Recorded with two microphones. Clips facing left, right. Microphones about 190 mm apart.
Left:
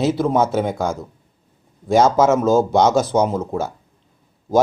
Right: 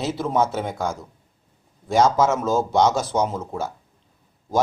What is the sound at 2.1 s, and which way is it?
Speech, 20° left (ahead or behind).